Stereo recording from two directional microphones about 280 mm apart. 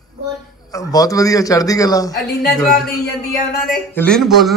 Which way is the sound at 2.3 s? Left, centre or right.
Left.